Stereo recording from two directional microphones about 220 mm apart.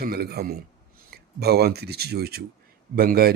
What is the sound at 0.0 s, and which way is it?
Speech, 45° right (ahead or behind).